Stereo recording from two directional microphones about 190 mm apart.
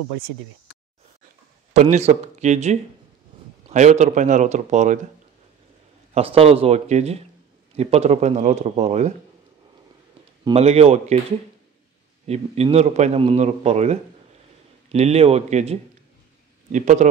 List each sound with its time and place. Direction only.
1.7 s a man's voice: 35° right (ahead or behind)
6.1 s a man's voice: 30° right (ahead or behind)
10.4 s a man's voice: 35° right (ahead or behind)
12.3 s a man's voice: 35° right (ahead or behind)